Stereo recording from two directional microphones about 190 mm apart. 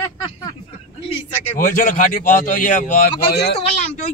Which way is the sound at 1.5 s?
45° left (ahead or behind).